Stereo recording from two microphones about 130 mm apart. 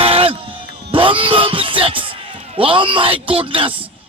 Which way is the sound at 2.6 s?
40° right (ahead or behind).